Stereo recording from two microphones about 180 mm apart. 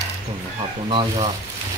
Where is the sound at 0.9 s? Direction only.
30° right (ahead or behind).